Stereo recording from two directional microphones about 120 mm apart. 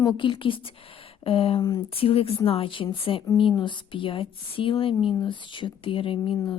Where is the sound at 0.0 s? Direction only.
40° left (ahead or behind).